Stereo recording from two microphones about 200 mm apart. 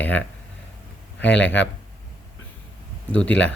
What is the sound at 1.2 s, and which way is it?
Speech, 60° left (ahead or behind).